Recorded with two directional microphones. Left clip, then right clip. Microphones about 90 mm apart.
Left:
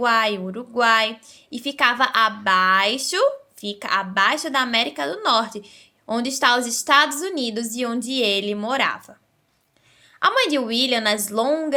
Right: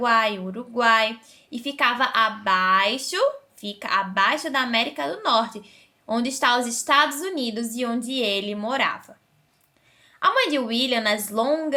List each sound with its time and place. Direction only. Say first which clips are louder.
0.0 s a woman's voice: left 1 dB; 35° left (ahead or behind)
10.2 s a woman's voice: left 2 dB; 35° left (ahead or behind)